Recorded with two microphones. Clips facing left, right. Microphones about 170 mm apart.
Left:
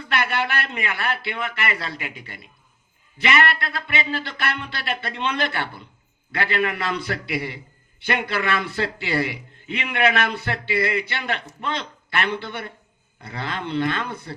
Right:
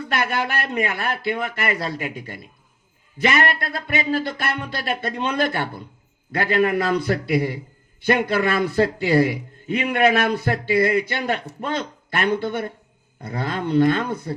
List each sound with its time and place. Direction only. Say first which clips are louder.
0.1 s a man's voice: even; 40° right (ahead or behind)
3.8 s a man's voice: right 7 dB; 40° right (ahead or behind)